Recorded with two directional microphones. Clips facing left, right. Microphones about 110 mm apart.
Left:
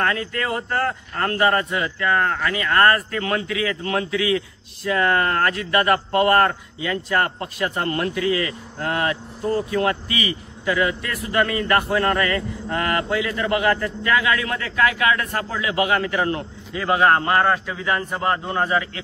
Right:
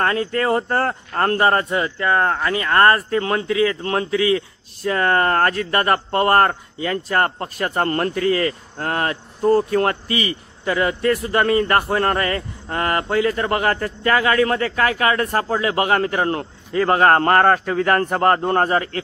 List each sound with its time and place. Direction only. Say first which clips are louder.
0.0 s a man's voice: right 4 dB; 35° right (ahead or behind)